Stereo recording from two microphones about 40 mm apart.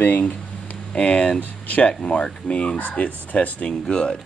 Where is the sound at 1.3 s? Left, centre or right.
Left.